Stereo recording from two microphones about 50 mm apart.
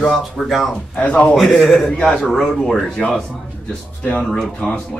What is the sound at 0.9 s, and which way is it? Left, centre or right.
Speech, centre.